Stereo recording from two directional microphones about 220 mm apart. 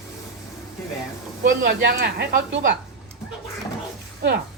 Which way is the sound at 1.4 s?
40° right (ahead or behind).